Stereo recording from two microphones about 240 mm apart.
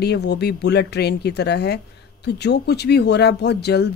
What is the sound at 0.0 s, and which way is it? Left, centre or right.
Speech, left.